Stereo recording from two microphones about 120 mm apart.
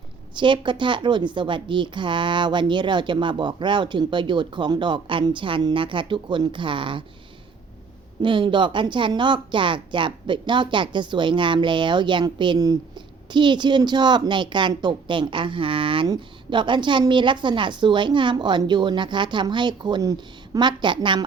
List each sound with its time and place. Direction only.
0.3 s a woman's voice: 40° right (ahead or behind)
8.2 s a woman's voice: 45° right (ahead or behind)